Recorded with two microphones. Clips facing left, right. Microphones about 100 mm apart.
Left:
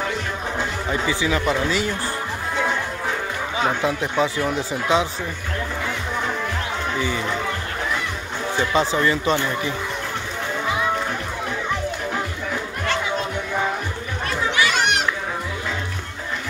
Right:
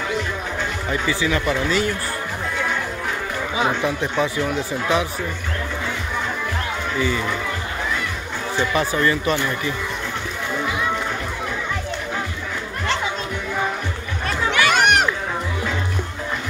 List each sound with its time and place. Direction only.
0.8 s speech: 15° left (ahead or behind)
4.2 s speech: 20° left (ahead or behind)
8.7 s speech: 20° left (ahead or behind)
14.5 s a sound: 55° right (ahead or behind)